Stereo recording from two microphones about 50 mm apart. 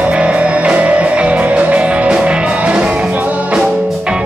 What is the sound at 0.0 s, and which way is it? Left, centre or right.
Music, right.